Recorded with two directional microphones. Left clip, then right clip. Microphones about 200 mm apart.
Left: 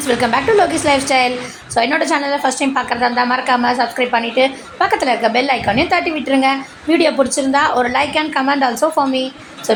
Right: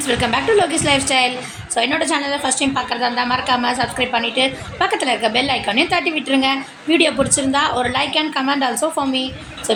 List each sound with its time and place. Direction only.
0.0 s a woman's voice: 10° left (ahead or behind)